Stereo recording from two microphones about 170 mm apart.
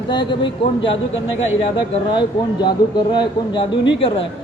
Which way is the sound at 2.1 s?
25° left (ahead or behind).